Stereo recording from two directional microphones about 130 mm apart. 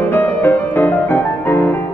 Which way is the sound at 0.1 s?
15° left (ahead or behind).